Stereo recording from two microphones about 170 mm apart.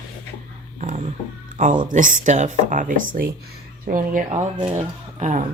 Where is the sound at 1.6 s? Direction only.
50° right (ahead or behind).